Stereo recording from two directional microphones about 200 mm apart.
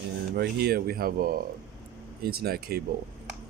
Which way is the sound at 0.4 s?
50° right (ahead or behind).